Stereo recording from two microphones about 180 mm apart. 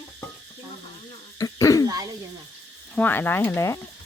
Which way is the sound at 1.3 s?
20° left (ahead or behind).